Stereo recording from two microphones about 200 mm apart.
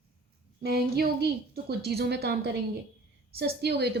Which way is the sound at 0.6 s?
50° right (ahead or behind).